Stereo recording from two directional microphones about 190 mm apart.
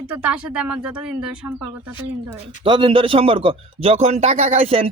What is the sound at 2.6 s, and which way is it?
A man's voice, 25° right (ahead or behind).